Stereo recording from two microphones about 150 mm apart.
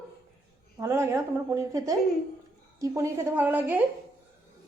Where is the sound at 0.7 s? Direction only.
20° right (ahead or behind).